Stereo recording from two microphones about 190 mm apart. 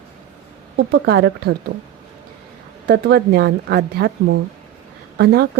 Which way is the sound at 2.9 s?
55° right (ahead or behind).